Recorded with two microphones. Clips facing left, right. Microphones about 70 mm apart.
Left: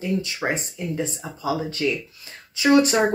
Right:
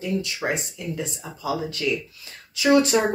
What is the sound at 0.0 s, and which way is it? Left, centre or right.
Speech, left.